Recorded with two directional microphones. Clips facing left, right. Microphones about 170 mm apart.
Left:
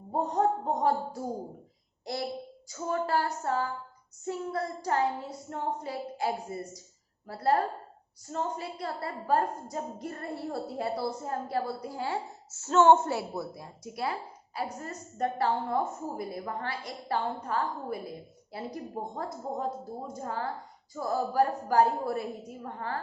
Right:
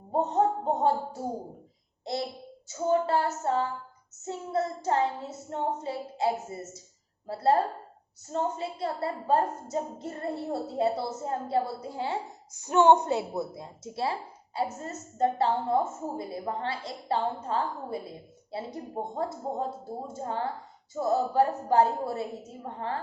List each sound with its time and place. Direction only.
0.2 s a woman's voice: 25° right (ahead or behind)
2.6 s a woman's voice: 25° right (ahead or behind)